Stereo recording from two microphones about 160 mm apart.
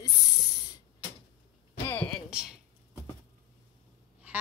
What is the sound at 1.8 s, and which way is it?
Speech, 10° left (ahead or behind).